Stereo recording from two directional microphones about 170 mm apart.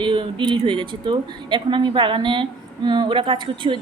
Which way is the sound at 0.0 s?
30° right (ahead or behind).